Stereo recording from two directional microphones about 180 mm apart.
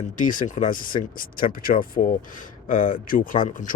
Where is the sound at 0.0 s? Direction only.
45° left (ahead or behind).